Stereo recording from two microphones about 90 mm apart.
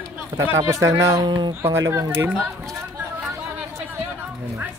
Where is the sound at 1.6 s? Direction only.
30° right (ahead or behind).